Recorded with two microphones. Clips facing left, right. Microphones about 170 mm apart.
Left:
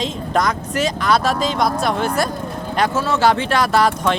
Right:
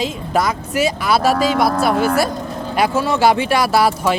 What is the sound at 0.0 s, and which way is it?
Speech, 5° right (ahead or behind).